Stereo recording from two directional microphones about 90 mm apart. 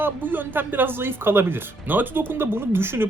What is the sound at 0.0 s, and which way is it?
Speech, 20° right (ahead or behind).